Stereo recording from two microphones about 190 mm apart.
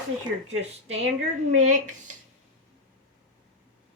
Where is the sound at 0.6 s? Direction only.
35° right (ahead or behind).